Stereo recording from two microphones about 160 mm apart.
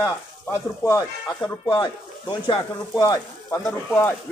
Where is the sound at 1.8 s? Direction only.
30° left (ahead or behind).